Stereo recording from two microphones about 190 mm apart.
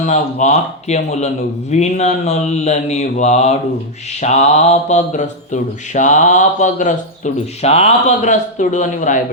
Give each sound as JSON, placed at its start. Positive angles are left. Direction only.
{"t": 0.0, "sound": "speech", "side_deg": 40}